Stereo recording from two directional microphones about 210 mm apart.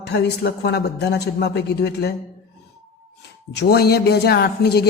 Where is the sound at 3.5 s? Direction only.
50° left (ahead or behind).